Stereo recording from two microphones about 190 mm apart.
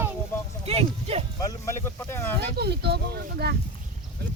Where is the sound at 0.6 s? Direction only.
30° right (ahead or behind).